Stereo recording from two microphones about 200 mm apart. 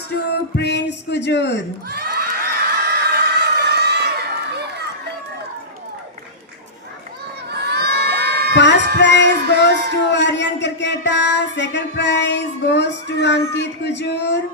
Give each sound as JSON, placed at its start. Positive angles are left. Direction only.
{"t": 0.5, "sound": "a man's voice", "side_deg": 60}
{"t": 1.9, "sound": "a sound", "side_deg": -50}
{"t": 4.5, "sound": "run", "side_deg": -55}
{"t": 7.5, "sound": "crowd", "side_deg": -55}
{"t": 9.0, "sound": "a sound", "side_deg": 60}
{"t": 13.5, "sound": "speech", "side_deg": 60}